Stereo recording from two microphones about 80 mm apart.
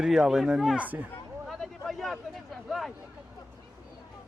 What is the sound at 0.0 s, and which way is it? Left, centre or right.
Speech, centre.